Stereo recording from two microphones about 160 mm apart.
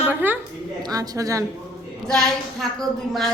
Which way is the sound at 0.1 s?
10° right (ahead or behind).